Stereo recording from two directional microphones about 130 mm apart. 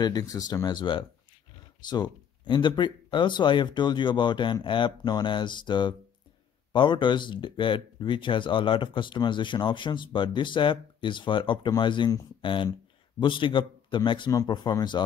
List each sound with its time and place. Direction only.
0.0 s speech: 30° left (ahead or behind)